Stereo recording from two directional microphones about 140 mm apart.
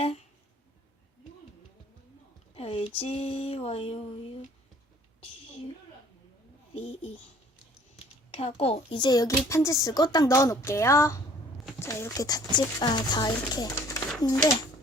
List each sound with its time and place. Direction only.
2.6 s speech: 45° left (ahead or behind)
6.7 s speech: 45° left (ahead or behind)
8.3 s speech: 45° left (ahead or behind)
8.9 s speech: 30° left (ahead or behind)